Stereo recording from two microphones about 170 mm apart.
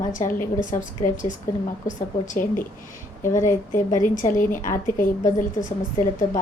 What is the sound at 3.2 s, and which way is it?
Speech, 15° left (ahead or behind).